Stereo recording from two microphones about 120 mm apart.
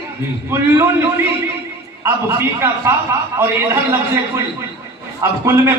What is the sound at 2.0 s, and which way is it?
A man's voice, 20° right (ahead or behind).